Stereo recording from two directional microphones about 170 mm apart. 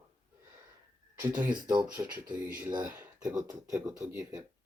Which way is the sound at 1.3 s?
10° right (ahead or behind).